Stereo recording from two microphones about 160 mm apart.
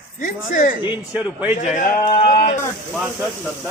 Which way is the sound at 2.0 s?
30° left (ahead or behind).